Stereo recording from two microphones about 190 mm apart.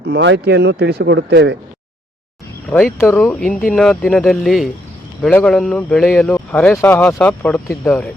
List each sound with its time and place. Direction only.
0.0 s speech: 65° right (ahead or behind)
2.6 s speech: 10° left (ahead or behind)